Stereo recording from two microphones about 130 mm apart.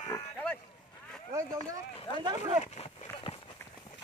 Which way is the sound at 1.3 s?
25° right (ahead or behind).